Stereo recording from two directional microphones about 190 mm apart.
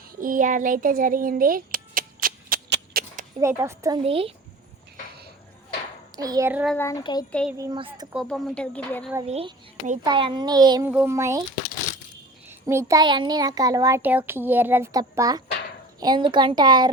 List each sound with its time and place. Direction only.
0.2 s a sound: 45° right (ahead or behind)
2.6 s a sound: 65° right (ahead or behind)
3.4 s a child's voice: 15° right (ahead or behind)
4.0 s a woman's voice: 30° right (ahead or behind)
6.1 s a woman's voice: 20° right (ahead or behind)
6.5 s a child's voice: 5° right (ahead or behind)
6.7 s speech: 15° left (ahead or behind)
7.5 s a woman's voice: 20° right (ahead or behind)
8.1 s speech: centre (ahead or behind)
9.2 s a child's voice: 35° right (ahead or behind)
10.0 s a woman's voice: 25° right (ahead or behind)
10.8 s a child's voice: 10° right (ahead or behind)
12.5 s a child's voice: 15° right (ahead or behind)